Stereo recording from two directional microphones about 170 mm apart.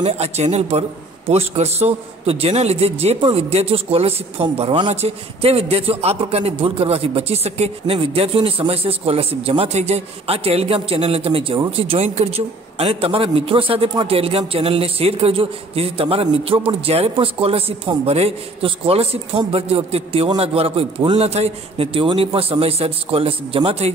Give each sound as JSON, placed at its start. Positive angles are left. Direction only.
{"t": 0.0, "sound": "a man's voice", "side_deg": -40}